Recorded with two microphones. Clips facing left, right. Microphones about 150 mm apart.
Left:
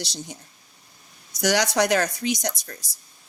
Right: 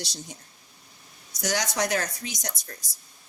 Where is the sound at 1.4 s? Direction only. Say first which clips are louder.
Left 6 dB; 75° left (ahead or behind).